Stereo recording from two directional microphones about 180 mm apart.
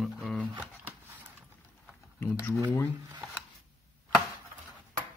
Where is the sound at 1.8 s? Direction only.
10° left (ahead or behind).